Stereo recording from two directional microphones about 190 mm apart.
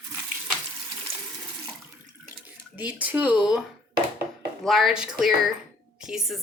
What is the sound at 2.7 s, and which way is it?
A woman's voice, 5° right (ahead or behind).